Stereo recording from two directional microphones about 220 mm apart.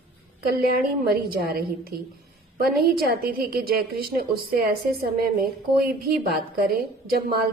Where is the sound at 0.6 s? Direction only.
45° right (ahead or behind).